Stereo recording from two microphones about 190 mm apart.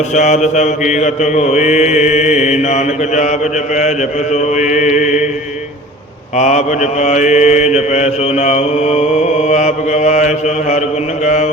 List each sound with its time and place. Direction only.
0.1 s mantra: 40° left (ahead or behind)
4.5 s mantra: 40° left (ahead or behind)
6.3 s mantra: 35° left (ahead or behind)